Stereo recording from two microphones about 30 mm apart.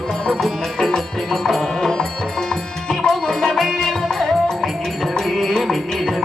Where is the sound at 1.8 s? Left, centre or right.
Left.